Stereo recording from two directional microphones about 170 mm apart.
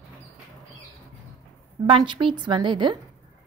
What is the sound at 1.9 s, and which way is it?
A woman's voice, 30° right (ahead or behind).